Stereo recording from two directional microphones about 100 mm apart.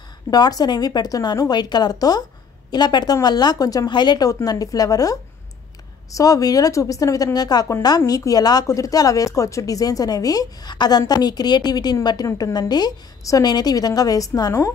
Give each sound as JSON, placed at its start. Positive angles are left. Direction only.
{"t": 0.3, "sound": "speech", "side_deg": 40}
{"t": 12.3, "sound": "a woman's voice", "side_deg": 30}
{"t": 12.5, "sound": "speech", "side_deg": 45}